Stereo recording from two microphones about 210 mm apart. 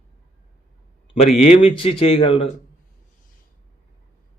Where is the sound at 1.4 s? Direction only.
30° left (ahead or behind).